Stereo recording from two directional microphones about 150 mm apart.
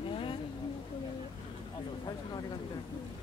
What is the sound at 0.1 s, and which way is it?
Vehicle, 35° left (ahead or behind).